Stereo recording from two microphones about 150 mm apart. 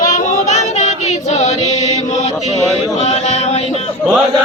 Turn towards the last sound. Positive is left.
turn(degrees=45)  # may be behind; listen again after turning